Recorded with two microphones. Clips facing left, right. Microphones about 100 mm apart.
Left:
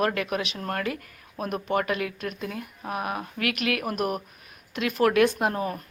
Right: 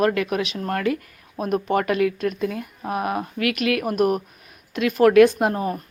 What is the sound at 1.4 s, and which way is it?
Speech, 35° right (ahead or behind).